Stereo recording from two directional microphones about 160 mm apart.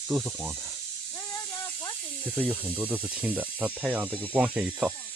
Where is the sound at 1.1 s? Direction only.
10° left (ahead or behind).